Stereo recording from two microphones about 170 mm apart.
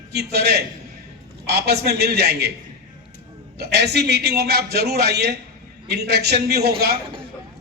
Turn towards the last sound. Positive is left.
turn(degrees=-70)  # may be behind; listen again after turning